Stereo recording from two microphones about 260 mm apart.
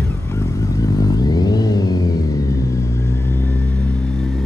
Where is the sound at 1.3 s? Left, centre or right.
Centre.